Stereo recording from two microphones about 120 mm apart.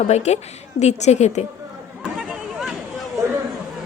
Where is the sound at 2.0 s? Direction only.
5° right (ahead or behind).